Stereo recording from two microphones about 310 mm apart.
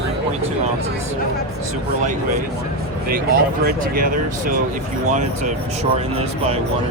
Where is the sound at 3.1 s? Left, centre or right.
Right.